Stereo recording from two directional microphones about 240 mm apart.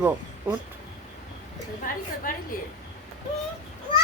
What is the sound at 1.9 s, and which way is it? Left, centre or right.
Speech, left.